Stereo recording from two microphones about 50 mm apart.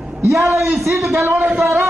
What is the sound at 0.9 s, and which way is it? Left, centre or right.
Speech, centre.